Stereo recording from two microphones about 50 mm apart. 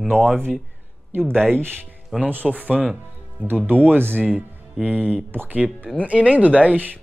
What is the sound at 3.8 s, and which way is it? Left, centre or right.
Speech, right.